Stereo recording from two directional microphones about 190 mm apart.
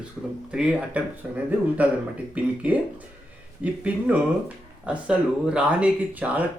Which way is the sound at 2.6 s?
5° right (ahead or behind).